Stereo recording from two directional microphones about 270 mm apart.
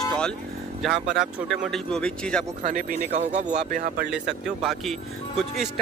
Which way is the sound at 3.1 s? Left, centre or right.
Right.